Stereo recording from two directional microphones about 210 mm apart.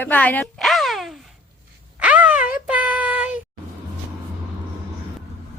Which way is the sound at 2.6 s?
5° right (ahead or behind).